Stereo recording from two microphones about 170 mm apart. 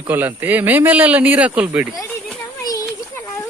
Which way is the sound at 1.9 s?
20° left (ahead or behind).